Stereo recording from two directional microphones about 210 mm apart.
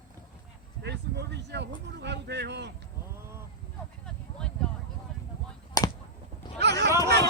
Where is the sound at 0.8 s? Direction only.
55° right (ahead or behind).